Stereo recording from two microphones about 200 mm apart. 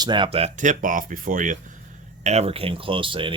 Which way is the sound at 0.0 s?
25° right (ahead or behind).